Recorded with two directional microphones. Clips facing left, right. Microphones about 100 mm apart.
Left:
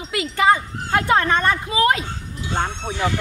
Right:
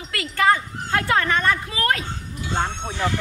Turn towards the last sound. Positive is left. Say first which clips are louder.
# left 1 dB
turn(degrees=5)  # may be behind; listen again after turning